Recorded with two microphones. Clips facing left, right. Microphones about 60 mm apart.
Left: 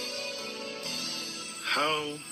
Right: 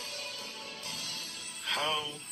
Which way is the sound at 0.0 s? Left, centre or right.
Left.